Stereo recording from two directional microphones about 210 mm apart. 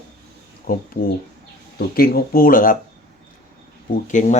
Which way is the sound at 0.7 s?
40° left (ahead or behind).